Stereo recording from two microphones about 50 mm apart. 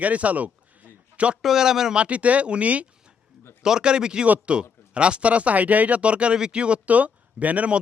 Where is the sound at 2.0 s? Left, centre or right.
Right.